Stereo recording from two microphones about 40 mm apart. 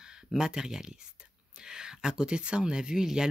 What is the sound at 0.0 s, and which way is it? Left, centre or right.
Speech, centre.